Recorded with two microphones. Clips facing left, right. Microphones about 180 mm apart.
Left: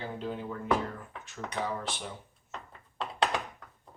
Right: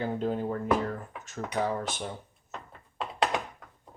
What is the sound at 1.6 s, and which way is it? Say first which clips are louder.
Speech: right 3 dB; 45° right (ahead or behind).